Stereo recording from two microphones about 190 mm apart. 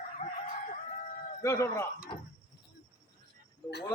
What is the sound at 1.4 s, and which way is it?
Speech, 15° left (ahead or behind).